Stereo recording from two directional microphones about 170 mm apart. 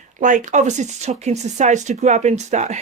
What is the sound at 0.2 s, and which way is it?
Speech, 45° right (ahead or behind).